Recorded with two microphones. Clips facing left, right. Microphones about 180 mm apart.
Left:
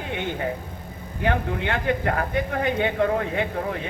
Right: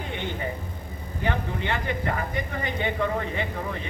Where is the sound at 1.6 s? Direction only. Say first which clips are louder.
Left 4 dB; 65° left (ahead or behind).